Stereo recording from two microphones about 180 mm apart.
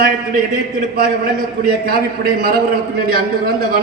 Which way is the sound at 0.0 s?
50° right (ahead or behind).